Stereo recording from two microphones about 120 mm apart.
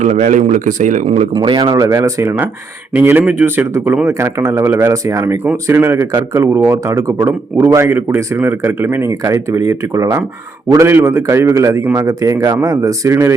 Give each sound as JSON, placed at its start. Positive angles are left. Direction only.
{"t": 0.0, "sound": "a man's voice", "side_deg": -85}
{"t": 1.3, "sound": "speech", "side_deg": -40}
{"t": 1.7, "sound": "speech", "side_deg": -25}